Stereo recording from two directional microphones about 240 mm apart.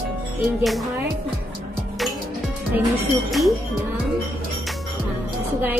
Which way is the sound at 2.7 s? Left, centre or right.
Centre.